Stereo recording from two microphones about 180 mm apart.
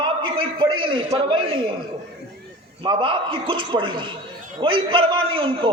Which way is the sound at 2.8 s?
25° right (ahead or behind).